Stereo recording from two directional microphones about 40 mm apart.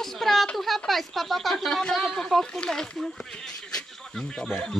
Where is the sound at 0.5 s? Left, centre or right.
Centre.